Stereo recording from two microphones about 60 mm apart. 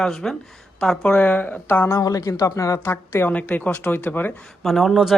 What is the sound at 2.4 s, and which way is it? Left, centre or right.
Speech, left.